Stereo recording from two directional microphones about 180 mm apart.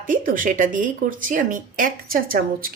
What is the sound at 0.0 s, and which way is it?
A woman's voice, 50° right (ahead or behind).